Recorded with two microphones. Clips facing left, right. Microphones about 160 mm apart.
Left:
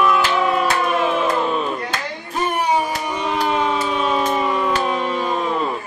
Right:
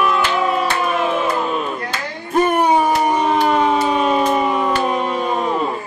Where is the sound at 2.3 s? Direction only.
50° right (ahead or behind).